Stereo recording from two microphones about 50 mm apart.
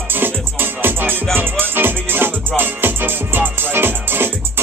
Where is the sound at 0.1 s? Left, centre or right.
Right.